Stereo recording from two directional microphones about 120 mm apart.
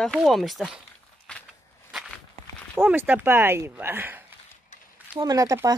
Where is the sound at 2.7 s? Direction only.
15° right (ahead or behind).